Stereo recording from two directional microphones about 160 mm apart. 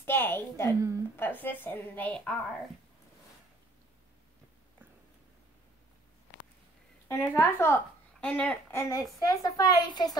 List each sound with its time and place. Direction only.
0.0 s a sound: 15° left (ahead or behind)
0.7 s a woman's voice: 20° right (ahead or behind)
1.1 s a woman's voice: 10° left (ahead or behind)
7.1 s a woman's voice: 15° left (ahead or behind)